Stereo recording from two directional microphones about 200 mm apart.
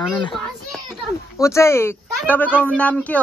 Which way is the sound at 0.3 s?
Centre (ahead or behind).